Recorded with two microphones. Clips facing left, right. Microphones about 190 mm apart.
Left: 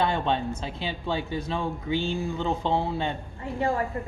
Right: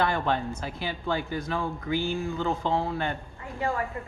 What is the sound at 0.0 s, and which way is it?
A woman's voice, 25° left (ahead or behind).